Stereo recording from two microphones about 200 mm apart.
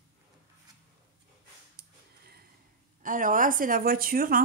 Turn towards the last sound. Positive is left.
turn(degrees=-50)  # may be behind; listen again after turning